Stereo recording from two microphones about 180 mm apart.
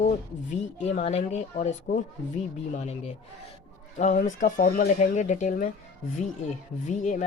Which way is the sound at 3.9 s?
45° left (ahead or behind).